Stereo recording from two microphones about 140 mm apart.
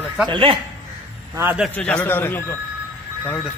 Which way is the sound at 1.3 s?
15° right (ahead or behind).